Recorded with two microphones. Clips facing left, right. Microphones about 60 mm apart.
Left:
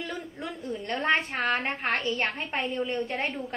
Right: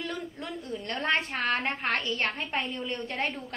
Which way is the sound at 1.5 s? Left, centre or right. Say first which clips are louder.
Even; centre.